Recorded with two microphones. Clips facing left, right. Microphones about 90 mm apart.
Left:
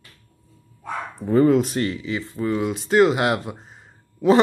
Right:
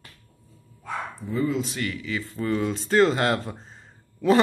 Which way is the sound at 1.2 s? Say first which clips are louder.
Left 10 dB; 55° left (ahead or behind).